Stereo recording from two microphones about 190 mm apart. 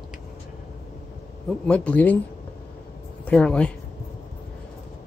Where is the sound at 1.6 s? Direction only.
5° left (ahead or behind).